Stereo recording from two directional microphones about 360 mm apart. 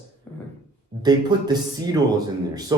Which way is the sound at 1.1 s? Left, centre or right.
Centre.